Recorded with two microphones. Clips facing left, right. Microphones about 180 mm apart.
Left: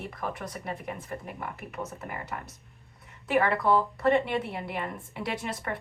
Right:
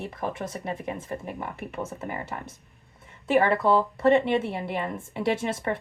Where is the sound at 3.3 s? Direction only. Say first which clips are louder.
Right 3 dB; 25° right (ahead or behind).